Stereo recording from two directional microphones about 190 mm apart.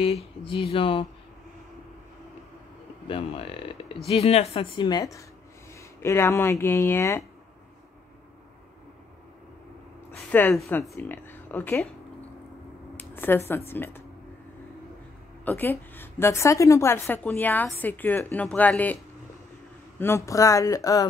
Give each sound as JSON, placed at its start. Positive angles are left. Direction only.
{"t": 0.0, "sound": "a woman's voice", "side_deg": 30}
{"t": 3.1, "sound": "a woman's voice", "side_deg": 30}
{"t": 10.1, "sound": "speech", "side_deg": 10}
{"t": 12.9, "sound": "a sound", "side_deg": 10}
{"t": 13.7, "sound": "a woman's voice", "side_deg": 10}
{"t": 15.4, "sound": "a woman's voice", "side_deg": 10}
{"t": 20.0, "sound": "a woman's voice", "side_deg": 15}